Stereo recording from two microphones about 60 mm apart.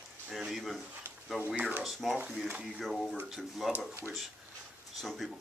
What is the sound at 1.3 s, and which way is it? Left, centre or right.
Speech, right.